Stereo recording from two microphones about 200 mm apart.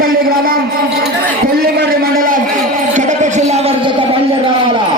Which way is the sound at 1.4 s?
50° right (ahead or behind).